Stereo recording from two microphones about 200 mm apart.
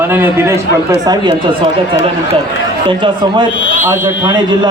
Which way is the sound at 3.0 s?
25° right (ahead or behind).